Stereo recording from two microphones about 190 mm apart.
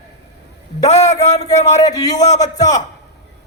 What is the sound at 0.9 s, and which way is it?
Speech, 35° left (ahead or behind).